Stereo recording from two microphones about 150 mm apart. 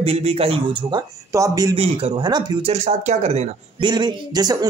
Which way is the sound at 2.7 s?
50° right (ahead or behind).